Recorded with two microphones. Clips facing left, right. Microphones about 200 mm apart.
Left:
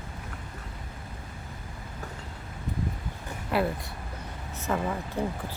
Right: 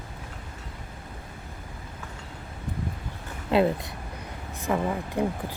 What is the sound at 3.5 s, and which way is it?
Speech, 25° right (ahead or behind).